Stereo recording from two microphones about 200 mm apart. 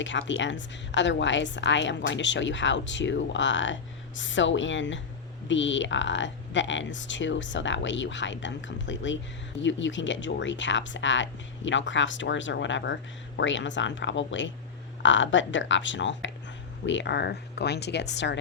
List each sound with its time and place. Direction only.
0.0 s a woman's voice: 65° left (ahead or behind)